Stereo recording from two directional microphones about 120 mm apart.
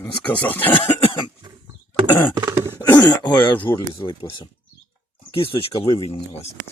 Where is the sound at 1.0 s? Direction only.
50° left (ahead or behind).